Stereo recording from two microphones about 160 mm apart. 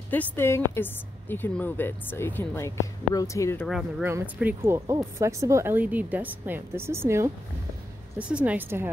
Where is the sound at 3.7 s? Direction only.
5° right (ahead or behind).